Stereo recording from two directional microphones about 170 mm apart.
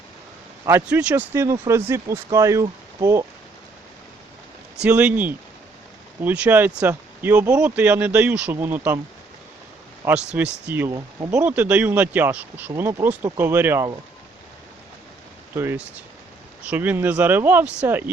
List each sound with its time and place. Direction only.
0.9 s speech: 5° right (ahead or behind)
4.8 s speech: 5° right (ahead or behind)
10.1 s speech: 10° right (ahead or behind)
15.5 s speech: 15° right (ahead or behind)